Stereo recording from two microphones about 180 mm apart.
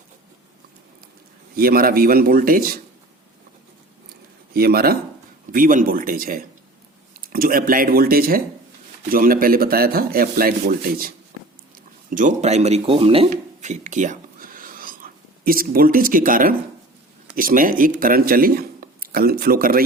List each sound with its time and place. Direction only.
1.5 s speech: 55° right (ahead or behind)
4.5 s speech: 60° right (ahead or behind)
12.1 s speech: 40° right (ahead or behind)
13.6 s whispering: 40° right (ahead or behind)
17.3 s speech: 50° right (ahead or behind)